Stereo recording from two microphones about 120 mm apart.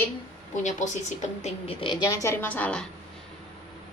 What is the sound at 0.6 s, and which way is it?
Speech, 90° left.